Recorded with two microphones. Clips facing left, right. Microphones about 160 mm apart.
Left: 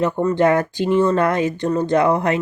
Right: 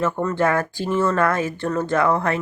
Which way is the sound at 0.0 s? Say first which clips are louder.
Left 4 dB; 15° left (ahead or behind).